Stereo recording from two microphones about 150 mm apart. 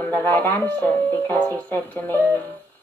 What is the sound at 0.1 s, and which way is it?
Speech, 15° left (ahead or behind).